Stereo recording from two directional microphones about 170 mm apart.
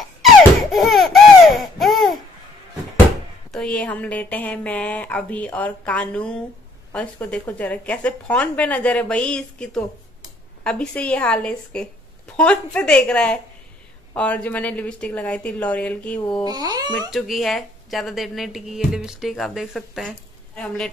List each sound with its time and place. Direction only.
0.7 s laughter: centre (ahead or behind)
3.5 s a woman's voice: 5° left (ahead or behind)
16.4 s speech: 25° right (ahead or behind)
17.1 s a woman's voice: centre (ahead or behind)